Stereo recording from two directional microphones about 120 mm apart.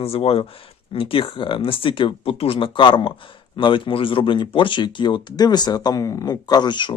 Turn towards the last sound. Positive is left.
turn(degrees=40)  # may be behind; listen again after turning